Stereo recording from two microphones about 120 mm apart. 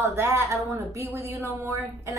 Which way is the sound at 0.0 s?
20° right (ahead or behind).